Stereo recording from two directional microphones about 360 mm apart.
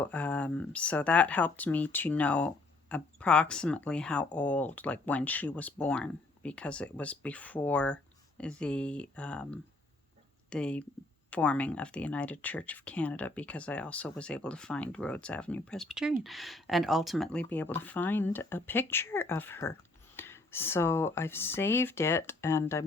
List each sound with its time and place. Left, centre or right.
0.0 s speech: centre